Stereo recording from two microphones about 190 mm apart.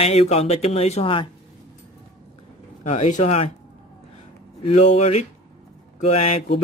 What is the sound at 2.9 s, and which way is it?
Speech, 40° left (ahead or behind).